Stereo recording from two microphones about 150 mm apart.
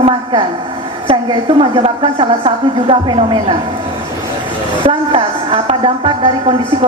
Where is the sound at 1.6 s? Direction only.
40° right (ahead or behind).